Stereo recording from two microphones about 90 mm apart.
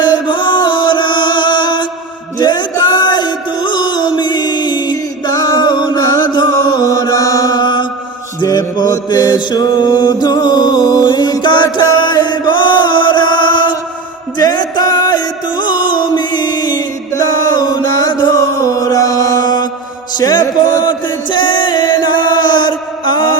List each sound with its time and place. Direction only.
0.0 s chant: 55° left (ahead or behind)
2.4 s music: 50° left (ahead or behind)
6.0 s music: 40° left (ahead or behind)
6.3 s mantra: 50° left (ahead or behind)
8.4 s music: 45° left (ahead or behind)
11.9 s chant: 55° left (ahead or behind)
14.3 s music: 50° left (ahead or behind)
20.8 s chant: 60° left (ahead or behind)